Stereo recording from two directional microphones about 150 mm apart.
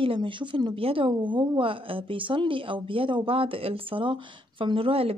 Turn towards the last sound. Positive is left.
turn(degrees=-40)  # may be behind; listen again after turning